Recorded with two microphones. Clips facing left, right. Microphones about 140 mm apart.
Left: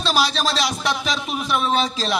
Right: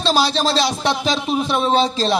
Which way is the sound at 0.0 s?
25° right (ahead or behind).